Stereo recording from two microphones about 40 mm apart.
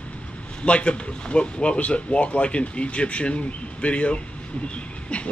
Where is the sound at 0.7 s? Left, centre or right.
Left.